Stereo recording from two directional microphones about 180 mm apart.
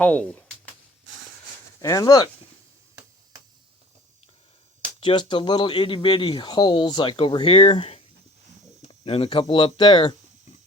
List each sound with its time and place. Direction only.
0.0 s speech: 5° left (ahead or behind)
1.8 s speech: 20° left (ahead or behind)
4.9 s speech: 25° left (ahead or behind)